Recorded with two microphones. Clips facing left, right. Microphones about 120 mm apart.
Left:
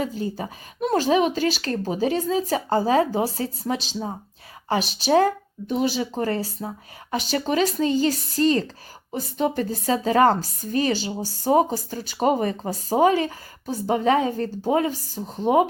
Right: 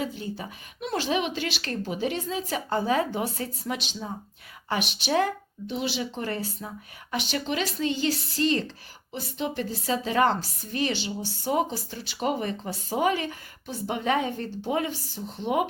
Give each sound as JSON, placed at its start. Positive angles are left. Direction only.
{"t": 0.0, "sound": "a woman's voice", "side_deg": 40}